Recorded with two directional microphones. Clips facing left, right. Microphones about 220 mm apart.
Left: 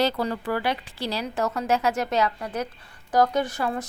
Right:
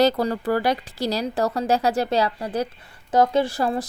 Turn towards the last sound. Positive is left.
turn(degrees=-35)  # may be behind; listen again after turning